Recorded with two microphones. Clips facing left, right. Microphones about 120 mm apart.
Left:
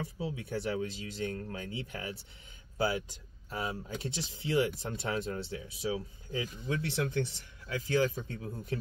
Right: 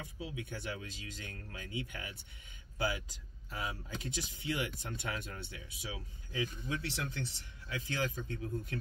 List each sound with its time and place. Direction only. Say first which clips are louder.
0.2 s speech: left 6 dB; 35° left (ahead or behind)
3.4 s speech: left 5 dB; 35° left (ahead or behind)